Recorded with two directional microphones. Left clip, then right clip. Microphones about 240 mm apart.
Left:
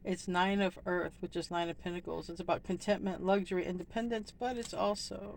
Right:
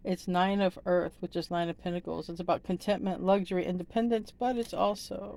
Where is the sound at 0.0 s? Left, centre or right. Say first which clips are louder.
Right 4 dB; right.